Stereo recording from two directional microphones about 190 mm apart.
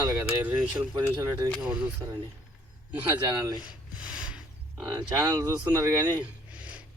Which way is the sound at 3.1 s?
20° right (ahead or behind).